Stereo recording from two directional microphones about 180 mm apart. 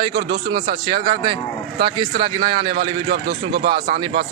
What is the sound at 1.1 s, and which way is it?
A man's voice, 25° right (ahead or behind).